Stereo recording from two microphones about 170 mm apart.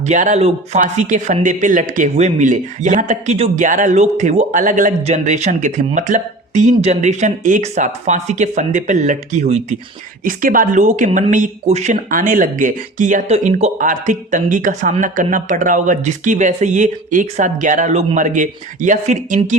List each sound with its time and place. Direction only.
0.0 s speech: 45° right (ahead or behind)
10.2 s speech: 55° right (ahead or behind)